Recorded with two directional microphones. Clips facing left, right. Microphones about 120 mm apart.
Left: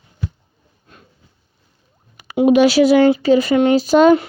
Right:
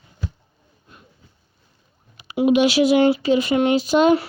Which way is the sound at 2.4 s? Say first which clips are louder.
Left 4 dB; 40° left (ahead or behind).